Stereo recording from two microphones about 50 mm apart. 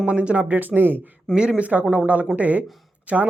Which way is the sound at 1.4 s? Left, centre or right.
Right.